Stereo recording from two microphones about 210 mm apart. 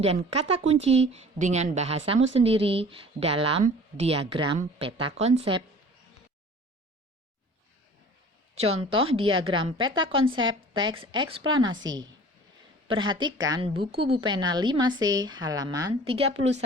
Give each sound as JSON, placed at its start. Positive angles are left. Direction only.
{"t": 0.0, "sound": "a woman's voice", "side_deg": -30}
{"t": 8.5, "sound": "a woman's voice", "side_deg": -25}